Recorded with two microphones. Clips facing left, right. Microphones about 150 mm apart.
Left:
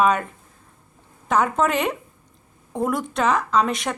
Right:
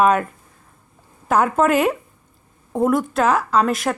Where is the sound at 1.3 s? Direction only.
5° right (ahead or behind).